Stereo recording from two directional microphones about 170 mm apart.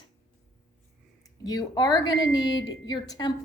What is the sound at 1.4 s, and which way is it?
Speech, 25° left (ahead or behind).